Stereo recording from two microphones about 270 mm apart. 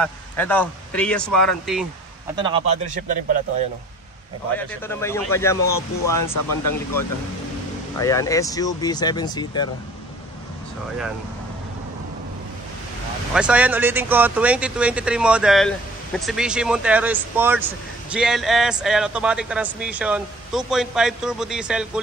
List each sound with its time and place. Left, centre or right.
0.0 s speech: centre
2.3 s a man's voice: centre
4.6 s speech: centre
8.0 s speech: centre
13.3 s speech: centre